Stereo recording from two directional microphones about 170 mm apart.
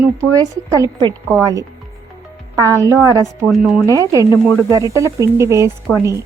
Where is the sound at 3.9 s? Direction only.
20° right (ahead or behind).